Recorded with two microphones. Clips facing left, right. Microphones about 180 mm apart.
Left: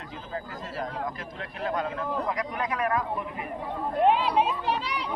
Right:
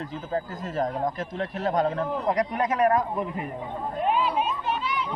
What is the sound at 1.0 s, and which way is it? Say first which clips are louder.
A man's voice: right 7 dB; 45° right (ahead or behind).